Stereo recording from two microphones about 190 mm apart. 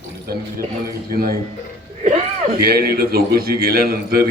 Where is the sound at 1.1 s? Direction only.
50° right (ahead or behind).